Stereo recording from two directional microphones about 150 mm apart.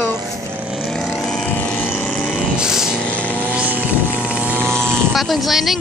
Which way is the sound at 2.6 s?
5° right (ahead or behind).